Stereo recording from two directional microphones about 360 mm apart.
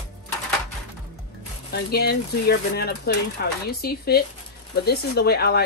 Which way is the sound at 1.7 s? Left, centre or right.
Left.